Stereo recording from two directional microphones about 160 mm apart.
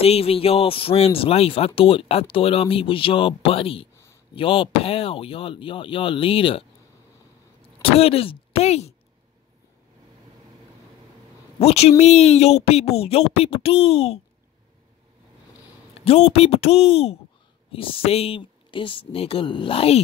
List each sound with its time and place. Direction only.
0.0 s speech: 40° left (ahead or behind)
7.8 s speech: 40° left (ahead or behind)
11.6 s speech: 40° left (ahead or behind)
16.0 s speech: 40° left (ahead or behind)